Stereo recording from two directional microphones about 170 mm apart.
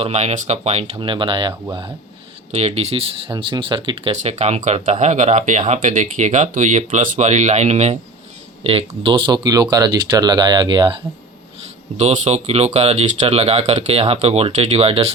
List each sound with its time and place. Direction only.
0.0 s speech: 40° right (ahead or behind)
11.9 s speech: 40° right (ahead or behind)